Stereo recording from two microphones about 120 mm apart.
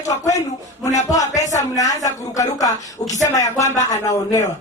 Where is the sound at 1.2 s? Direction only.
85° left.